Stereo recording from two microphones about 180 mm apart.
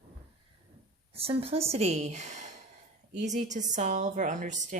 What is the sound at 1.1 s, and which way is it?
A woman's voice, 35° right (ahead or behind).